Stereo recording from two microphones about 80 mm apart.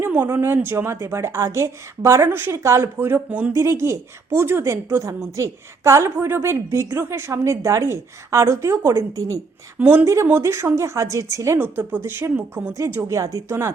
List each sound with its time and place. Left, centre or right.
0.0 s a sound: right
0.3 s a woman's voice: right
3.2 s a woman's voice: centre
3.5 s a woman's voice: right
9.7 s a woman's voice: centre
10.0 s a woman's voice: right
11.5 s a woman's voice: right